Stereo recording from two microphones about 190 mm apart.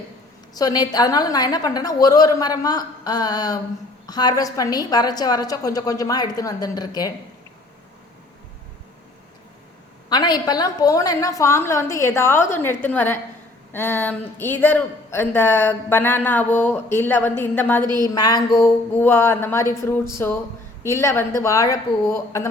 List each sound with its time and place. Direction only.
0.5 s a woman's voice: 20° left (ahead or behind)
10.1 s speech: 20° left (ahead or behind)